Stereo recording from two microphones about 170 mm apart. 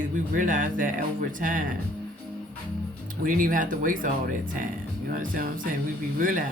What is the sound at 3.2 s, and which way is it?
Speech, 55° right (ahead or behind).